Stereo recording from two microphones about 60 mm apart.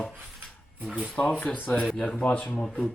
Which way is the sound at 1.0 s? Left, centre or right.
Left.